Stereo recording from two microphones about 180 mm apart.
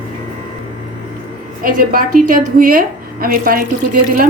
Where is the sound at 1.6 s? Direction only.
50° right (ahead or behind).